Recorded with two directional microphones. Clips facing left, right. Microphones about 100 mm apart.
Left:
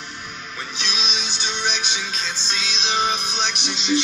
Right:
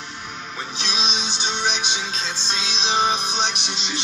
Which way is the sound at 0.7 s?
35° right (ahead or behind).